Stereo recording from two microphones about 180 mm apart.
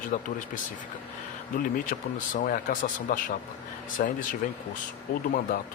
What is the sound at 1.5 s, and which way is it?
Speech, 45° left (ahead or behind).